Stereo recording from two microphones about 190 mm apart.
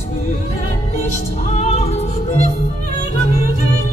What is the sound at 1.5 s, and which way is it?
Music, 35° left (ahead or behind).